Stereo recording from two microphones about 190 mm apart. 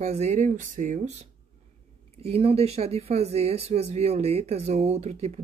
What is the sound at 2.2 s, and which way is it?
Speech, 30° right (ahead or behind).